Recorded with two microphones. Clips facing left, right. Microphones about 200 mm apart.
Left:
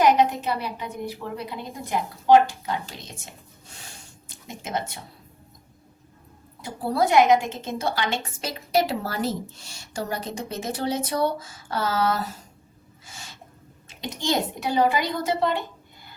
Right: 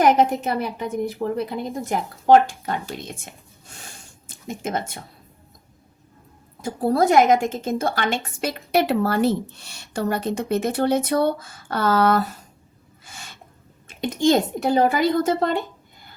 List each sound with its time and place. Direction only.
0.0 s a woman's voice: 50° right (ahead or behind)
4.3 s speech: 50° right (ahead or behind)
6.6 s a woman's voice: 45° right (ahead or behind)
13.1 s gasp: 60° right (ahead or behind)
14.0 s a woman's voice: 50° right (ahead or behind)